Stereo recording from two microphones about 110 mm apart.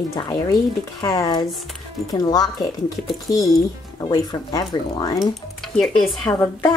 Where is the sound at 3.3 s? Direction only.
Centre (ahead or behind).